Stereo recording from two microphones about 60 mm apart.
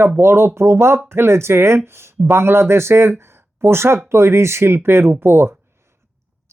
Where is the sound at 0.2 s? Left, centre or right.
Right.